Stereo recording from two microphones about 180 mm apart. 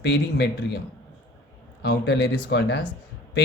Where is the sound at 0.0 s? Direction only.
70° left (ahead or behind).